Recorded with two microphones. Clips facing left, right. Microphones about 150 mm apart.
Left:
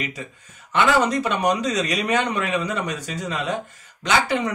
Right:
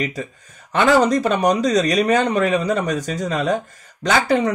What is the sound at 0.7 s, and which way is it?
Speech, 35° right (ahead or behind).